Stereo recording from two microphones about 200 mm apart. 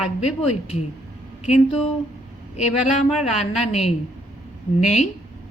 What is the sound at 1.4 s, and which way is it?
Speech, 35° left (ahead or behind).